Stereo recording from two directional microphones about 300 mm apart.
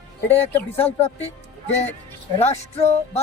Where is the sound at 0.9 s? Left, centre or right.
Left.